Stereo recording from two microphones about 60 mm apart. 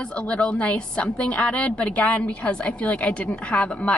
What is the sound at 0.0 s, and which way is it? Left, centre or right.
A woman's voice, centre.